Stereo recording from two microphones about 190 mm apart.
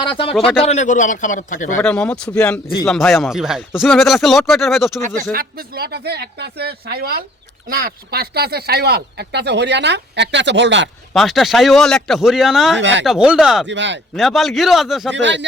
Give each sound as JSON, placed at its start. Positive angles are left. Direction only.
{"t": 0.0, "sound": "speech", "side_deg": 25}
{"t": 0.3, "sound": "speech", "side_deg": 5}
{"t": 0.7, "sound": "a man's voice", "side_deg": 40}
{"t": 1.8, "sound": "speech", "side_deg": 5}
{"t": 2.6, "sound": "speech", "side_deg": 20}
{"t": 2.9, "sound": "speech", "side_deg": 0}
{"t": 5.0, "sound": "speech", "side_deg": -50}
{"t": 11.1, "sound": "speech", "side_deg": 0}
{"t": 12.8, "sound": "speech", "side_deg": -75}
{"t": 13.1, "sound": "speech", "side_deg": -5}
{"t": 13.7, "sound": "speech", "side_deg": -70}
{"t": 14.2, "sound": "speech", "side_deg": 0}
{"t": 15.1, "sound": "speech", "side_deg": -70}